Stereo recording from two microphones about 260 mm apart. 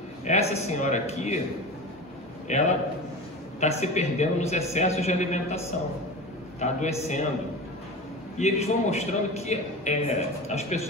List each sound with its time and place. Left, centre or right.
0.2 s a man's voice: left
2.5 s a man's voice: left
6.6 s a man's voice: left
8.4 s a man's voice: left